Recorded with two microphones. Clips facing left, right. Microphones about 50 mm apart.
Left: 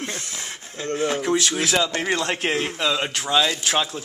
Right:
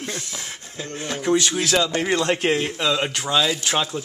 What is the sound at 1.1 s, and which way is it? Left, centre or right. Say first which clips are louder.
A man's voice: right 1 dB; centre.